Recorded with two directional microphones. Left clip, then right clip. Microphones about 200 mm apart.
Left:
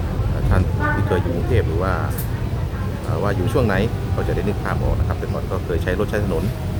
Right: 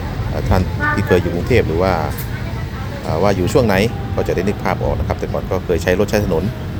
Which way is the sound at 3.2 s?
15° right (ahead or behind).